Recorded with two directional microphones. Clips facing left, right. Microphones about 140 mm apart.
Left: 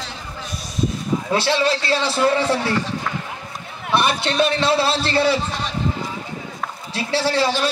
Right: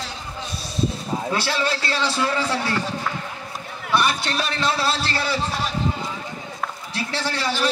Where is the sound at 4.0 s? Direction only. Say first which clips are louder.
Left 5 dB; 25° left (ahead or behind).